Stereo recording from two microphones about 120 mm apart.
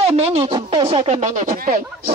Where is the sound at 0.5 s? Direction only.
45° right (ahead or behind).